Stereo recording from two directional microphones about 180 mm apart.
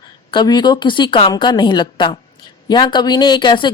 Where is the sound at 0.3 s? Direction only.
25° left (ahead or behind).